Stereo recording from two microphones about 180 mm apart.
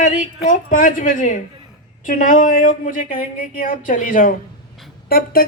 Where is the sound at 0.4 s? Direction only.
45° left (ahead or behind).